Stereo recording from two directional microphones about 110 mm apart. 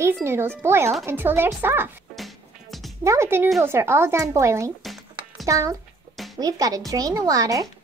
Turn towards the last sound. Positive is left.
turn(degrees=-30)  # may be behind; listen again after turning